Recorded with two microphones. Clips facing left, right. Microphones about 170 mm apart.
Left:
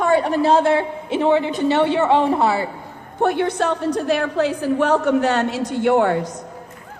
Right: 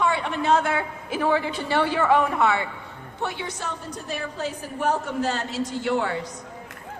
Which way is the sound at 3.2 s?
55° left (ahead or behind).